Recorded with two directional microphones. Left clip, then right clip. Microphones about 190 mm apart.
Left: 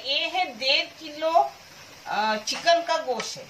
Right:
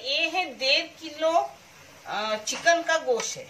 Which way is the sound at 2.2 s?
35° right (ahead or behind).